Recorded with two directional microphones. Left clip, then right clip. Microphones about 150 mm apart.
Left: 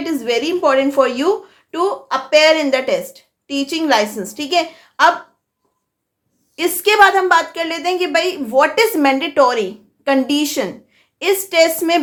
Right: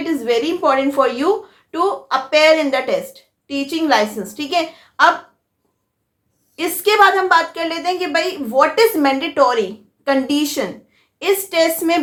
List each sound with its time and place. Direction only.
0.0 s a woman's voice: 25° left (ahead or behind)
6.6 s a woman's voice: 35° left (ahead or behind)